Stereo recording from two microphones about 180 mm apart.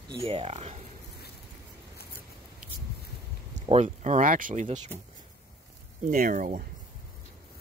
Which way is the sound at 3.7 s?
40° right (ahead or behind).